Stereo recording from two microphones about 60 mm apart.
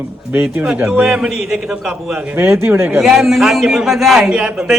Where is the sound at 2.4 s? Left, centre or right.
Right.